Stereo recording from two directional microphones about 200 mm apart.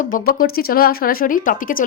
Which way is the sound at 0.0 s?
45° left (ahead or behind).